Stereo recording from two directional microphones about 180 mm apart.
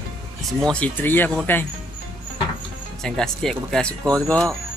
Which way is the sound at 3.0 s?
5° left (ahead or behind).